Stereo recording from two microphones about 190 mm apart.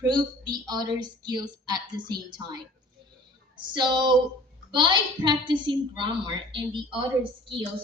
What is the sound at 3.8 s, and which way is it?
A woman's voice, 25° right (ahead or behind).